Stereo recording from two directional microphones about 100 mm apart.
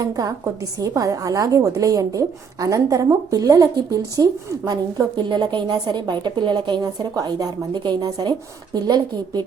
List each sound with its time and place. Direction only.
0.0 s a woman's voice: 40° right (ahead or behind)